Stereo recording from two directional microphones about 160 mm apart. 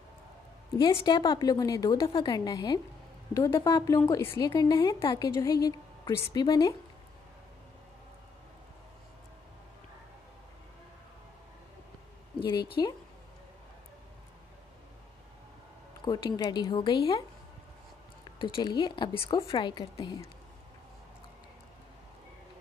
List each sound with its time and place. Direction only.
0.7 s a woman's voice: 25° left (ahead or behind)
12.8 s a woman's voice: 25° left (ahead or behind)
16.0 s a woman's voice: 25° left (ahead or behind)
18.4 s a woman's voice: 30° left (ahead or behind)